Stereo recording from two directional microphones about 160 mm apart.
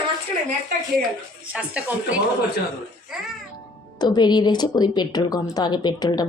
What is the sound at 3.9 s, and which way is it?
Speech, 25° left (ahead or behind).